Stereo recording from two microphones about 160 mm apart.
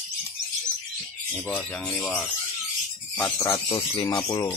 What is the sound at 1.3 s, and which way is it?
Speech, 10° left (ahead or behind).